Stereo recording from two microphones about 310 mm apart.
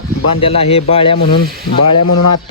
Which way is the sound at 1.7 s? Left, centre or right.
Left.